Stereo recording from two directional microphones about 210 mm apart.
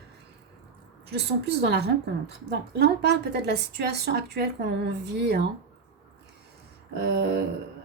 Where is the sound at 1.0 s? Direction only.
50° right (ahead or behind).